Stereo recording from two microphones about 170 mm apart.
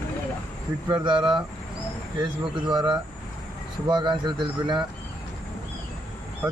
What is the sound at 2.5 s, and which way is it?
Speech, 25° right (ahead or behind).